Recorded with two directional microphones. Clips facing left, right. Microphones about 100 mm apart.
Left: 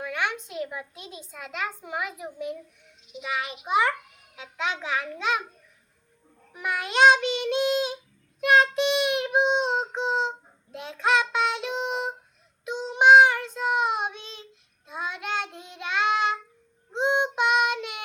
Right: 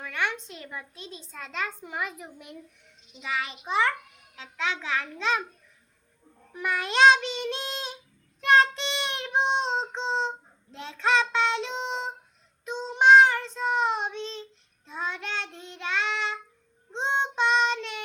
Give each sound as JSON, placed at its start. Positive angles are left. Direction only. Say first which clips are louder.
{"t": 0.0, "sound": "a woman's voice", "louder": "left 1 dB", "side_deg": 5}
{"t": 6.5, "sound": "child singing", "louder": "even", "side_deg": 5}